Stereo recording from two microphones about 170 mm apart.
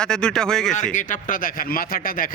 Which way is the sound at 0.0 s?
5° left (ahead or behind).